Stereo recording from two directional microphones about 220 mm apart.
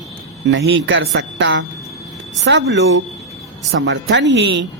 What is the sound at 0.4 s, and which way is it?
Speech, 55° right (ahead or behind).